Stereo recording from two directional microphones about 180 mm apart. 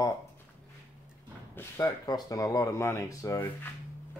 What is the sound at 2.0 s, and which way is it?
Speech, 20° left (ahead or behind).